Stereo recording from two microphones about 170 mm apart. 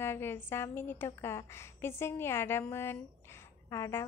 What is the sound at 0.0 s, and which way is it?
A woman's voice, 15° left (ahead or behind).